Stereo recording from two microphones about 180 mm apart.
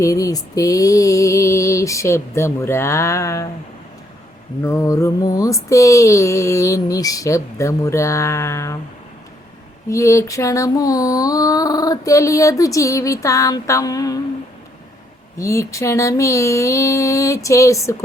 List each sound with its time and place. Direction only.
0.0 s music: 20° left (ahead or behind)
4.6 s music: 15° left (ahead or behind)
9.9 s a sound: 15° left (ahead or behind)
15.4 s music: 15° left (ahead or behind)